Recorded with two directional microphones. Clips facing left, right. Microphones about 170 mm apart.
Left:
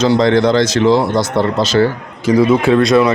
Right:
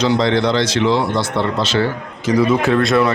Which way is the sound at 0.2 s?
45° left (ahead or behind).